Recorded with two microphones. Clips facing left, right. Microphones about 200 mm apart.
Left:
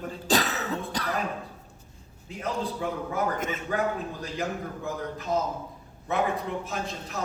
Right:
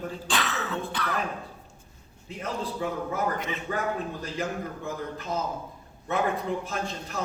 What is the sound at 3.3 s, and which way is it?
Speech, 45° left (ahead or behind).